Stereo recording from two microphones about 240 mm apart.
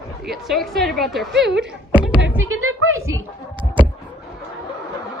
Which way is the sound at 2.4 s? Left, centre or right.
Right.